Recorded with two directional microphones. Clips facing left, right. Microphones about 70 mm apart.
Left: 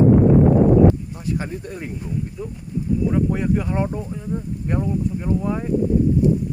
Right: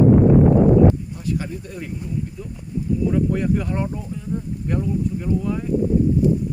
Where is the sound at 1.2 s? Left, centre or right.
Left.